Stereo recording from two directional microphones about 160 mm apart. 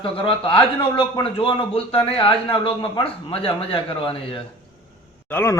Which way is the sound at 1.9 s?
35° left (ahead or behind).